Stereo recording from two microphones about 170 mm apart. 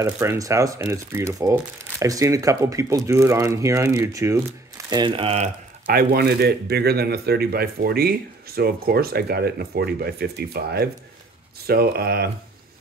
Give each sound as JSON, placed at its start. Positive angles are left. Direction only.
{"t": 0.0, "sound": "speech", "side_deg": -15}
{"t": 5.9, "sound": "speech", "side_deg": -60}